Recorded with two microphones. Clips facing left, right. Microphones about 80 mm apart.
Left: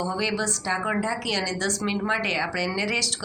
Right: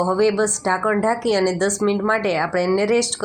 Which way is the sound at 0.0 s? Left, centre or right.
Right.